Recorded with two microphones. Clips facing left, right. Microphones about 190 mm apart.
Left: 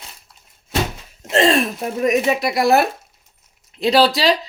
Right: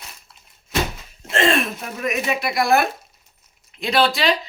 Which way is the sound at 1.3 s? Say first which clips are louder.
Left 4 dB; 35° left (ahead or behind).